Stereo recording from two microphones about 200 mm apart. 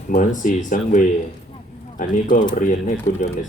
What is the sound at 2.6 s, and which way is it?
Speech, 35° left (ahead or behind).